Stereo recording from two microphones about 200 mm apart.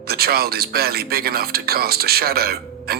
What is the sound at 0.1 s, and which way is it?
Speech, 50° right (ahead or behind).